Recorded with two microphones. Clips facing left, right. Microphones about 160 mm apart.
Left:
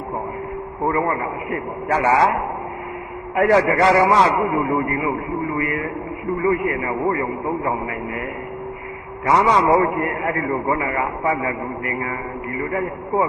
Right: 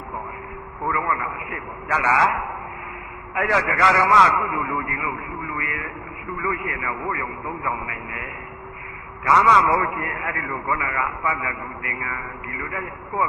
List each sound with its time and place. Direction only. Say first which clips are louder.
0.9 s a man's voice: left 4 dB; 35° left (ahead or behind)
3.3 s a man's voice: left 7 dB; 35° left (ahead or behind)
9.2 s a man's voice: left 2 dB; 35° left (ahead or behind)